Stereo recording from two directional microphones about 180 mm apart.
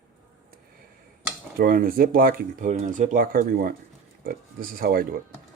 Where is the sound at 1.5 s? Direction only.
55° right (ahead or behind).